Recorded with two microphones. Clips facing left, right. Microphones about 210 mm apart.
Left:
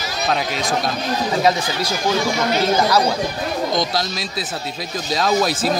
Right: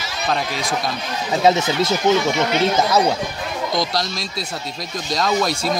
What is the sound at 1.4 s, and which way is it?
Speech, 25° right (ahead or behind).